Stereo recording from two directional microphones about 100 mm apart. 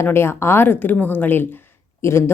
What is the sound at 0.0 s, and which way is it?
A woman's voice, 25° left (ahead or behind).